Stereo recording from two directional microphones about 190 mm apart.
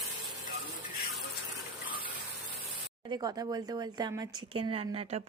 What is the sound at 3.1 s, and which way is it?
Speech, 20° right (ahead or behind).